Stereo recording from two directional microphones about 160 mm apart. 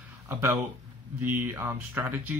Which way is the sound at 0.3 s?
15° right (ahead or behind).